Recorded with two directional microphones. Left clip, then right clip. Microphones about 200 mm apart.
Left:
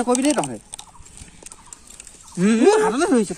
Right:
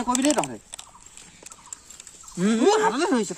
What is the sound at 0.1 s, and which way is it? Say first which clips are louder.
Speech: left 2 dB; 10° right (ahead or behind).